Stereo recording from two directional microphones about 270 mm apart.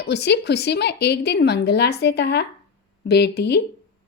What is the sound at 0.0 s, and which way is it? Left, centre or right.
A woman's voice, left.